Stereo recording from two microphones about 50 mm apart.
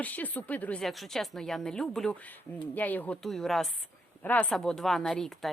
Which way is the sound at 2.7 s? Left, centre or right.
Left.